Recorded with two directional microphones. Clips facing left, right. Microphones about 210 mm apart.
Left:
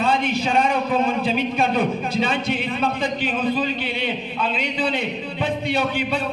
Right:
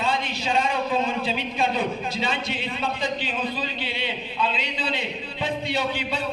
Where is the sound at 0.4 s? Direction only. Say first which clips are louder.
Left 4 dB; 55° left (ahead or behind).